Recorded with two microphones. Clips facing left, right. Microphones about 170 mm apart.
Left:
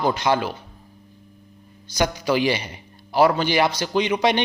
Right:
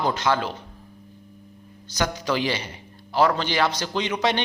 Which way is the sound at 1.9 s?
10° left (ahead or behind).